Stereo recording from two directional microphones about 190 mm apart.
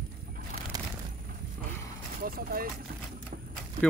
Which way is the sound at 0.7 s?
20° right (ahead or behind).